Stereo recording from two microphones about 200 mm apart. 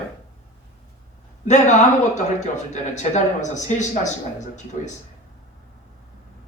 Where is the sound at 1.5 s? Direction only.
35° left (ahead or behind).